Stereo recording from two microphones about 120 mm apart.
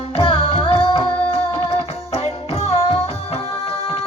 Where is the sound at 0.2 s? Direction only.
50° left (ahead or behind).